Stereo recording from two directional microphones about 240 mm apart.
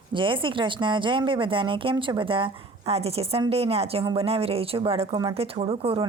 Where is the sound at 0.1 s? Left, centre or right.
Right.